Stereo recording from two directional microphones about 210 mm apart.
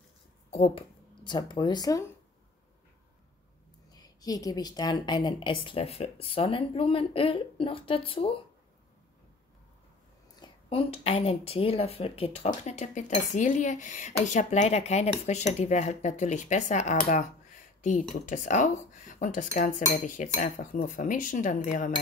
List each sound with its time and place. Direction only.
0.5 s speech: 30° left (ahead or behind)
3.9 s a woman's voice: 20° left (ahead or behind)
10.4 s a woman's voice: 25° left (ahead or behind)
18.1 s speech: 35° left (ahead or behind)